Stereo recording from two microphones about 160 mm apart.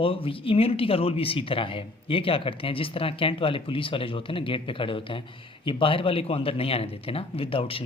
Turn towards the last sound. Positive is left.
turn(degrees=35)  # may be behind; listen again after turning